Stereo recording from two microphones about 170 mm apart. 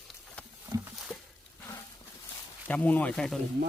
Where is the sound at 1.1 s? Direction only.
5° left (ahead or behind).